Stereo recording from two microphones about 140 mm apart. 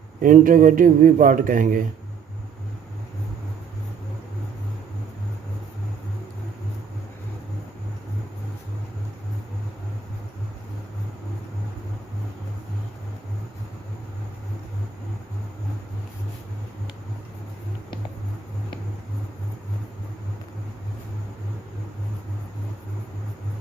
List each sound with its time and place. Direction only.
0.2 s a man's voice: 75° right (ahead or behind)